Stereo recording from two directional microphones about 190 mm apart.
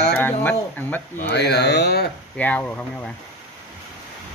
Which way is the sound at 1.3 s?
60° left (ahead or behind).